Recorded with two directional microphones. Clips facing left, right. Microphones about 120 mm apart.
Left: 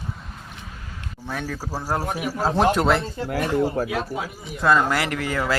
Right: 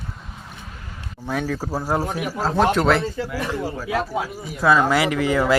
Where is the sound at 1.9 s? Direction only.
5° left (ahead or behind).